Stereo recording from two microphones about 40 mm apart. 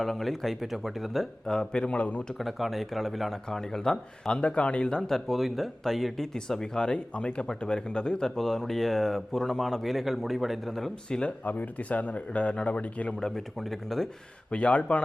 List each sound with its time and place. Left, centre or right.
0.0 s speech: centre
1.5 s speech: centre; by 2.2 s left
2.4 s speech: centre
4.3 s speech: left
5.3 s speech: centre
6.3 s speech: centre
8.4 s speech: centre
11.1 s speech: left
11.4 s speech: left
13.1 s speech: centre
13.6 s speech: centre
14.5 s speech: left